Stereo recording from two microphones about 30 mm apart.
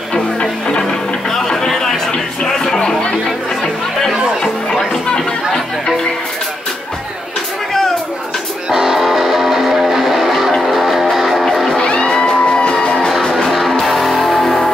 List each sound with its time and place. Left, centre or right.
0.1 s music: left
0.8 s music: centre
4.1 s music: right
5.0 s chatter: left
8.8 s music: centre
11.7 s music: left
13.5 s music: centre